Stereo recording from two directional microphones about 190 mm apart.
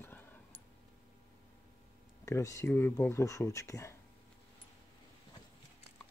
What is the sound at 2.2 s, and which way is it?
Speech, 15° left (ahead or behind).